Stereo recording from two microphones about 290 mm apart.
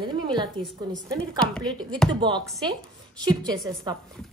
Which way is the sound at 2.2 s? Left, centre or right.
Centre.